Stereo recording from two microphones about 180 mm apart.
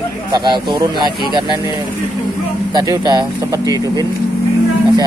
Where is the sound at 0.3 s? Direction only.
25° right (ahead or behind).